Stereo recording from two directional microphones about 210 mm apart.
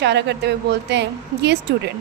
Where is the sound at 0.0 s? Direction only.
55° right (ahead or behind).